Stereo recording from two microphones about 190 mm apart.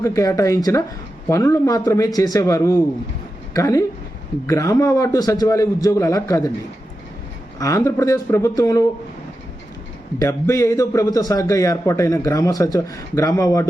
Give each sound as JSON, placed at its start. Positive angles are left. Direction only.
{"t": 0.0, "sound": "a man's voice", "side_deg": 15}
{"t": 7.6, "sound": "a man's voice", "side_deg": 15}
{"t": 10.2, "sound": "a man's voice", "side_deg": 15}